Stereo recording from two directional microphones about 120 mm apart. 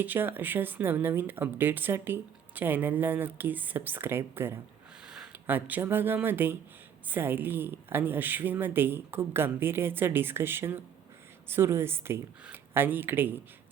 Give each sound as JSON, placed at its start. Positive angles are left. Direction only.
{"t": 0.0, "sound": "a woman's voice", "side_deg": -15}
{"t": 5.0, "sound": "a sound", "side_deg": -5}
{"t": 5.5, "sound": "a woman's voice", "side_deg": -15}